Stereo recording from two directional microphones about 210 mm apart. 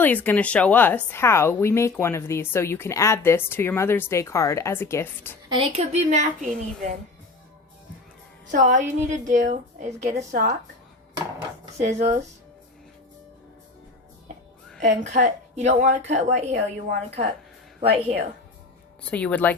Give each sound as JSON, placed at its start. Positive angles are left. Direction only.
{"t": 0.0, "sound": "a woman's voice", "side_deg": 10}
{"t": 5.5, "sound": "a woman's voice", "side_deg": -25}
{"t": 8.4, "sound": "a woman's voice", "side_deg": -35}
{"t": 11.8, "sound": "a woman's voice", "side_deg": -35}
{"t": 14.8, "sound": "a woman's voice", "side_deg": -35}
{"t": 19.1, "sound": "a woman's voice", "side_deg": 5}